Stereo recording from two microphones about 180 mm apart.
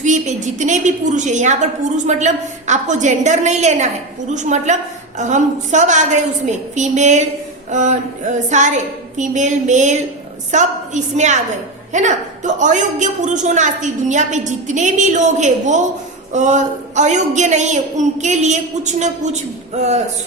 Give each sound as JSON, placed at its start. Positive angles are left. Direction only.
{"t": 0.0, "sound": "a woman's voice", "side_deg": -40}